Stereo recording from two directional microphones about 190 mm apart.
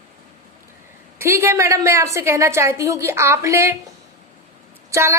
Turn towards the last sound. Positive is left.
turn(degrees=-15)  # may be behind; listen again after turning